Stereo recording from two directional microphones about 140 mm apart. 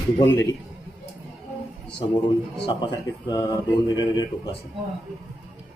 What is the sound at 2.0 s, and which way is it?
A man's voice, 35° left (ahead or behind).